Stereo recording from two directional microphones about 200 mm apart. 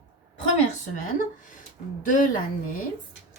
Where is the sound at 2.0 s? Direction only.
40° left (ahead or behind).